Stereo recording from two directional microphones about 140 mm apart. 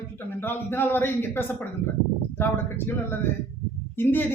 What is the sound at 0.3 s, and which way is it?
A man's voice, 15° left (ahead or behind).